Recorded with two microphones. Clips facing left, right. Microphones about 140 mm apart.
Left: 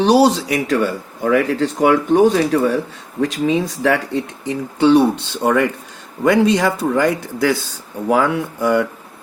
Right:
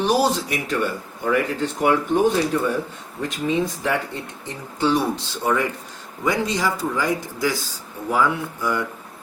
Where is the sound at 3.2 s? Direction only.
85° left; by 8.8 s 70° left (ahead or behind).